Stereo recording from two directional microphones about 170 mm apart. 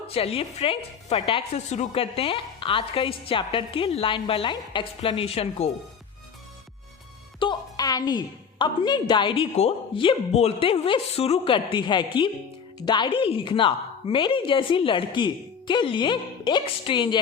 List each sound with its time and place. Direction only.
0.1 s a woman's voice: 35° left (ahead or behind)
7.3 s a woman's voice: 25° left (ahead or behind)